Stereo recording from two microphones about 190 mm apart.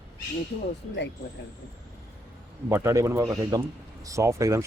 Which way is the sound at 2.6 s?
15° right (ahead or behind).